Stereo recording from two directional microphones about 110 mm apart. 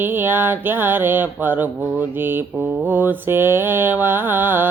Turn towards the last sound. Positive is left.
turn(degrees=-20)  # may be behind; listen again after turning